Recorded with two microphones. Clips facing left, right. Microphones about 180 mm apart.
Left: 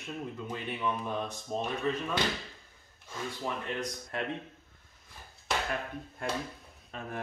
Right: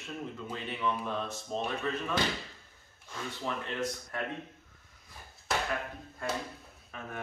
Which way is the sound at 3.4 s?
15° left (ahead or behind).